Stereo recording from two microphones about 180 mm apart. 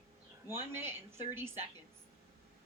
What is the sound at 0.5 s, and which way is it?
A woman's voice, 15° right (ahead or behind).